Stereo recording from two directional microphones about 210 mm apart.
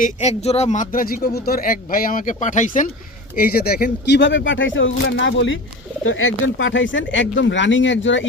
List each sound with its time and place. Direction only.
0.0 s a man's voice: 30° left (ahead or behind); by 8.3 s 60° left (ahead or behind)